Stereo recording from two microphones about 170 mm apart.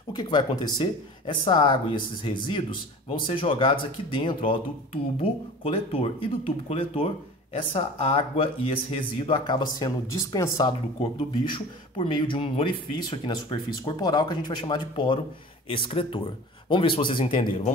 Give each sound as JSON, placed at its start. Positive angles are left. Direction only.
{"t": 0.1, "sound": "speech", "side_deg": 25}